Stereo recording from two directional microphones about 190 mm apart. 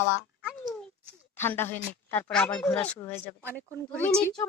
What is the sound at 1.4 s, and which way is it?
A woman's voice, 10° left (ahead or behind).